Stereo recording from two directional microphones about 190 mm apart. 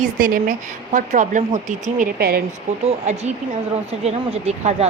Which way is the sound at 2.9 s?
35° right (ahead or behind).